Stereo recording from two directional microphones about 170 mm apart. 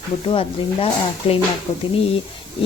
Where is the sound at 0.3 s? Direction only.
30° left (ahead or behind).